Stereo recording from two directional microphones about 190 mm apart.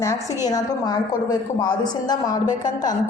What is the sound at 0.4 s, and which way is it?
A woman's voice, 20° left (ahead or behind).